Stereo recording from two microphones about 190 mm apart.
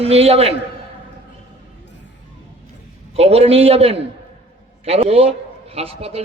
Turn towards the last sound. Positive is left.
turn(degrees=-30)  # may be behind; listen again after turning